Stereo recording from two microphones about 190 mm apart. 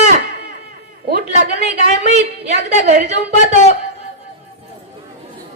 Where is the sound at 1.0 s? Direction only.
55° right (ahead or behind).